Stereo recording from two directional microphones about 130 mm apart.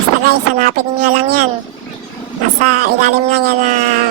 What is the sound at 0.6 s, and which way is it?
Speech, 90° right.